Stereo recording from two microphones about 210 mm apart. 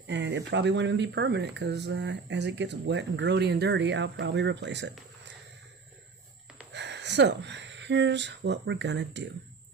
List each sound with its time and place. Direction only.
0.1 s speech: 55° right (ahead or behind)
6.7 s speech: 55° right (ahead or behind)